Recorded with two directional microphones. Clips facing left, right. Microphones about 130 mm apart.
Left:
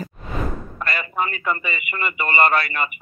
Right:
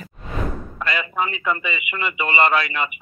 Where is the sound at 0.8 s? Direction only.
50° left (ahead or behind).